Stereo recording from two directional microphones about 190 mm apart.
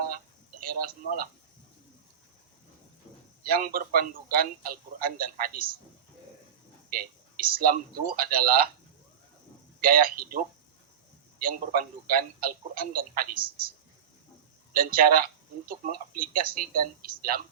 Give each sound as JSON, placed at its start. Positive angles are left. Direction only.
{"t": 0.6, "sound": "a man's voice", "side_deg": -50}
{"t": 3.4, "sound": "a man's voice", "side_deg": -50}
{"t": 6.9, "sound": "a man's voice", "side_deg": -50}
{"t": 9.8, "sound": "a man's voice", "side_deg": -50}
{"t": 12.0, "sound": "a man's voice", "side_deg": -50}